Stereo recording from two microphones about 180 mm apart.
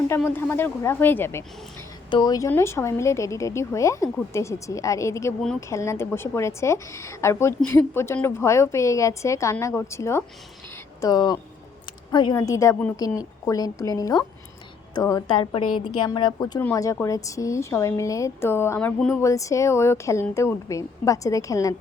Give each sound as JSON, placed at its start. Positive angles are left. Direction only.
{"t": 0.3, "sound": "a woman's voice", "side_deg": 10}
{"t": 2.0, "sound": "a woman's voice", "side_deg": 25}
{"t": 19.2, "sound": "a woman's voice", "side_deg": 15}